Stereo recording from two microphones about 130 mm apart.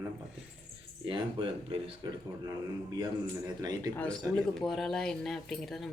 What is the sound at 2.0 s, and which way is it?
Speech, 30° right (ahead or behind).